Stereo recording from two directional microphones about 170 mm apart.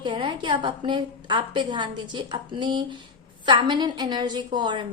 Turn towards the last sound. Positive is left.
turn(degrees=-25)  # may be behind; listen again after turning